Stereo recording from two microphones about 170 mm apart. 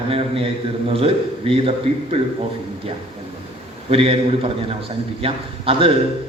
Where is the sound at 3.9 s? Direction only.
35° right (ahead or behind).